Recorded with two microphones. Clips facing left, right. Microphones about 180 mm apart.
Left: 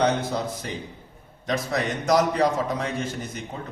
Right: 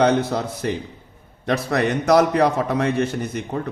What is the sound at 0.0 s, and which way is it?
Speech, 65° right (ahead or behind).